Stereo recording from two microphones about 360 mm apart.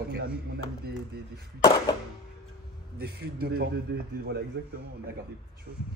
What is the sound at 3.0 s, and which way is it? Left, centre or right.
A man's voice, right.